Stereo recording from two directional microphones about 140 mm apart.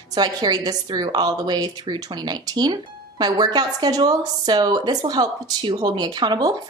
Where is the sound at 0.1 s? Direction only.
30° right (ahead or behind).